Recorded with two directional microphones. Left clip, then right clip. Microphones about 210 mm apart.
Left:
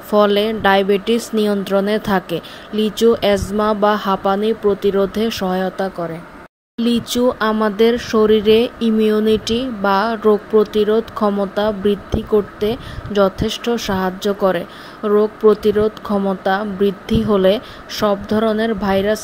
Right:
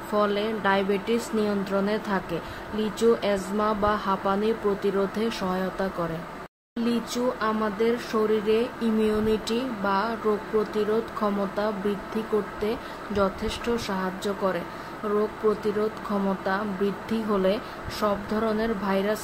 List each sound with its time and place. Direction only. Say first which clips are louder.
0.1 s speech: left 11 dB; 35° left (ahead or behind)